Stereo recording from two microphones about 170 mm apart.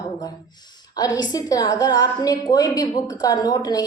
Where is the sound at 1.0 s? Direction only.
20° left (ahead or behind).